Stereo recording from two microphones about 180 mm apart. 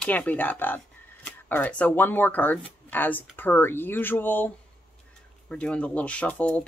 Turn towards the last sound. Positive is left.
turn(degrees=5)  # may be behind; listen again after turning